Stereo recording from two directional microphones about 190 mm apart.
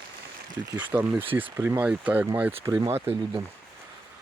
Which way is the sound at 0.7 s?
10° right (ahead or behind).